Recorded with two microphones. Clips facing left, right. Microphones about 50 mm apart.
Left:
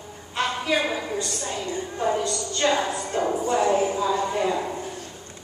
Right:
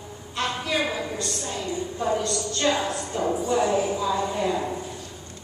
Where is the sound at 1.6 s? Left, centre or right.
Left.